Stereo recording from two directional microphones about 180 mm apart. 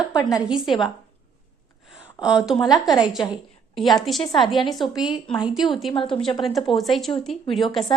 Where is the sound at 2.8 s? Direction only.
Centre (ahead or behind).